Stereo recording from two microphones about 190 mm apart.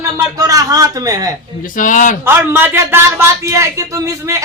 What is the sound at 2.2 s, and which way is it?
A man's voice, 10° right (ahead or behind).